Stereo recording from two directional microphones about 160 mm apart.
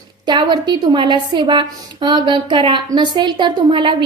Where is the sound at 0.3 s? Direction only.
30° right (ahead or behind).